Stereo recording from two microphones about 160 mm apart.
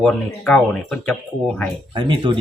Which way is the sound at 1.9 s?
30° right (ahead or behind).